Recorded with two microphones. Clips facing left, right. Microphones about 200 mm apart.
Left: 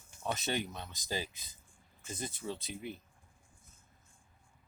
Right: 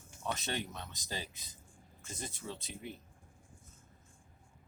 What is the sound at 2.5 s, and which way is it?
Speech, 15° left (ahead or behind).